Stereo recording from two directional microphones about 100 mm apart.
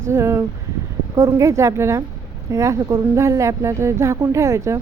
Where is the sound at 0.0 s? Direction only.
25° right (ahead or behind).